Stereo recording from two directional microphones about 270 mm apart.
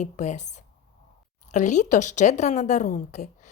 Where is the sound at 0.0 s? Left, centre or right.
Left.